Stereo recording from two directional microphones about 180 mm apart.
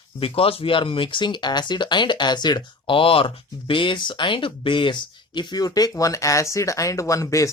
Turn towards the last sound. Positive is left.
turn(degrees=15)  # may be behind; listen again after turning